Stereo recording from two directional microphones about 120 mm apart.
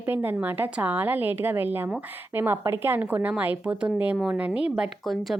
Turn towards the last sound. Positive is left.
turn(degrees=-5)  # may be behind; listen again after turning